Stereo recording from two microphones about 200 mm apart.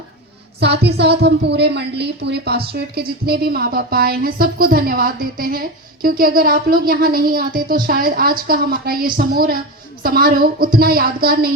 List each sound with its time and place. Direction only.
0.6 s a woman's voice: 55° right (ahead or behind)